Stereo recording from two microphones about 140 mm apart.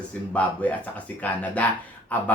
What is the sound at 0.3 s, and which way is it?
Speech, 10° left (ahead or behind).